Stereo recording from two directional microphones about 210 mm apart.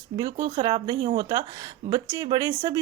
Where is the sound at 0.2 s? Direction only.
15° right (ahead or behind).